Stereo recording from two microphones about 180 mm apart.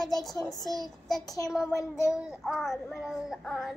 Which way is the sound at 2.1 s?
5° right (ahead or behind).